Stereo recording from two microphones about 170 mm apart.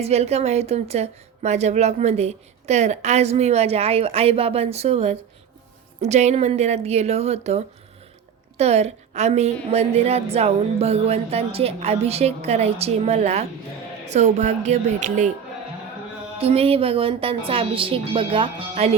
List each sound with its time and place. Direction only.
0.0 s a woman's voice: 40° right (ahead or behind)
16.4 s a woman's voice: 35° right (ahead or behind)